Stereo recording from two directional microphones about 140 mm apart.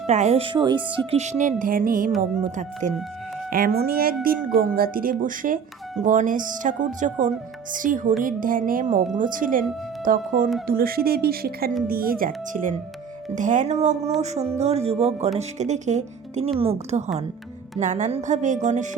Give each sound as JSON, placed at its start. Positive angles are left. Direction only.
{"t": 0.1, "sound": "speech", "side_deg": -55}
{"t": 1.1, "sound": "speech", "side_deg": -55}
{"t": 2.4, "sound": "speech", "side_deg": -60}
{"t": 3.8, "sound": "a woman's voice", "side_deg": -90}
{"t": 5.2, "sound": "speech", "side_deg": -75}
{"t": 6.0, "sound": "speech", "side_deg": -65}
{"t": 10.7, "sound": "a woman's voice", "side_deg": -90}
{"t": 13.3, "sound": "speech", "side_deg": -65}